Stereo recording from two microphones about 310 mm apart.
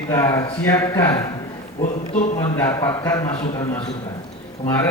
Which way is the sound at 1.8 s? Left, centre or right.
Left.